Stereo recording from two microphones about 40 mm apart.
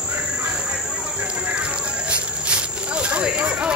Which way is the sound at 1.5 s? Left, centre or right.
Right.